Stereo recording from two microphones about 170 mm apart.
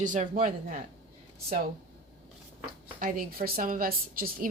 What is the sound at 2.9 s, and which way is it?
A woman's voice, 55° right (ahead or behind).